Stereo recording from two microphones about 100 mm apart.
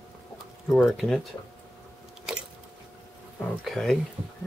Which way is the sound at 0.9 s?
Centre (ahead or behind).